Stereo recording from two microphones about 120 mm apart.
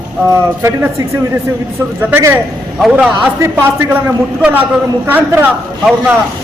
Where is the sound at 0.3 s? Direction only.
25° right (ahead or behind).